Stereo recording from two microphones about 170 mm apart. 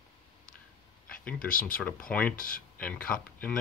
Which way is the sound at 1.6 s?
5° left (ahead or behind).